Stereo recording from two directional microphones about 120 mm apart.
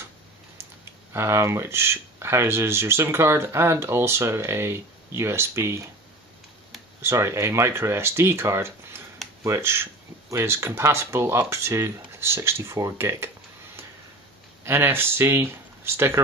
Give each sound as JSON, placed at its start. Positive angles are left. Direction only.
{"t": 1.1, "sound": "speech", "side_deg": -20}
{"t": 7.0, "sound": "speech", "side_deg": -20}
{"t": 14.6, "sound": "speech", "side_deg": -20}